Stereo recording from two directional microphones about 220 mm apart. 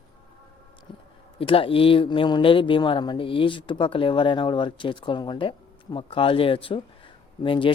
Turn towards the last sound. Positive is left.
turn(degrees=25)  # may be behind; listen again after turning